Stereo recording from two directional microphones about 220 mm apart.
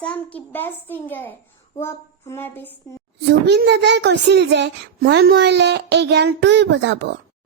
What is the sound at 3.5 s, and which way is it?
Child singing, 50° right (ahead or behind).